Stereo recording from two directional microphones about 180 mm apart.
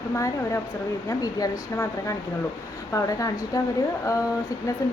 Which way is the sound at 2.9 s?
20° left (ahead or behind).